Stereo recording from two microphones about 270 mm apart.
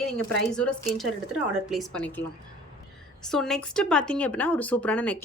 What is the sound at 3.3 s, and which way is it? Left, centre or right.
Speech, centre.